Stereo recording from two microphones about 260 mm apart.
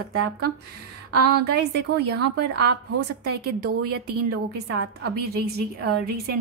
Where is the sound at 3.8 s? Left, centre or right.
Right.